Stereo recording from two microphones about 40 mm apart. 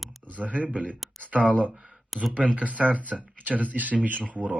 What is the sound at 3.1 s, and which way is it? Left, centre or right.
Speech, centre.